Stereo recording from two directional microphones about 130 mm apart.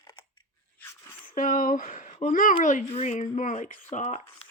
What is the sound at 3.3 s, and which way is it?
Speech, 75° left (ahead or behind).